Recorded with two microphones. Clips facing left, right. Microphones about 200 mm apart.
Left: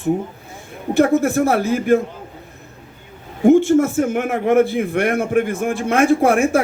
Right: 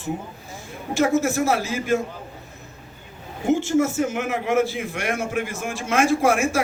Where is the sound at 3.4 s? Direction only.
55° left (ahead or behind).